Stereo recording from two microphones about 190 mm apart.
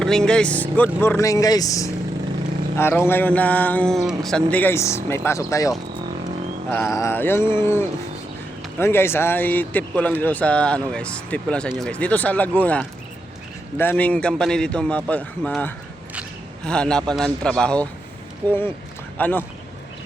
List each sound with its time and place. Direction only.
0.0 s a man's voice: 5° left (ahead or behind)
19.1 s speech: 10° left (ahead or behind)